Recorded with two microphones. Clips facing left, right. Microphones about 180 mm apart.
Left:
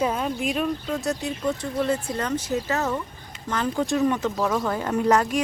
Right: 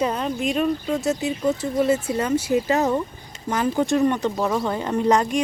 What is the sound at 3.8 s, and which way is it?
Speech, centre (ahead or behind).